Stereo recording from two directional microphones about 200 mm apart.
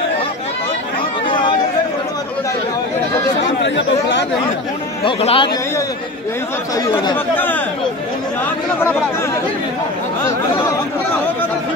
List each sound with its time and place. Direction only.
1.2 s a sound: 25° left (ahead or behind)
3.6 s speech: 60° left (ahead or behind)
5.0 s speech: 25° left (ahead or behind)
6.7 s speech: 20° left (ahead or behind)
7.3 s speech: 10° left (ahead or behind)
10.2 s speech: 15° left (ahead or behind)